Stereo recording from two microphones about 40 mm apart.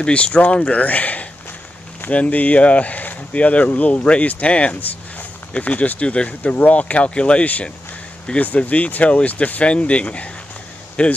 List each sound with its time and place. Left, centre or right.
0.0 s speech: left
8.4 s speech: left